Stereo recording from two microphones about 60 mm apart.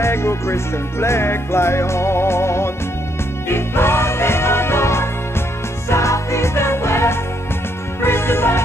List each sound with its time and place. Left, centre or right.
0.0 s music: left